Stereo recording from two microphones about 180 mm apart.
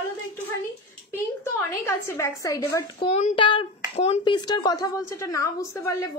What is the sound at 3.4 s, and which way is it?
Speech, 25° left (ahead or behind).